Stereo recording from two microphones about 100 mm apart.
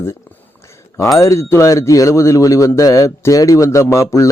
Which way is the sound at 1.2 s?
30° left (ahead or behind).